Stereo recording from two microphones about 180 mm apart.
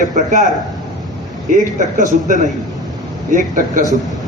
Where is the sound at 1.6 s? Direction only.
45° right (ahead or behind).